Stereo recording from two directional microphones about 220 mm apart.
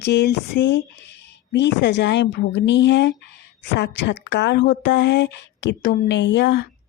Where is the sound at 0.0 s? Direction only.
50° left (ahead or behind).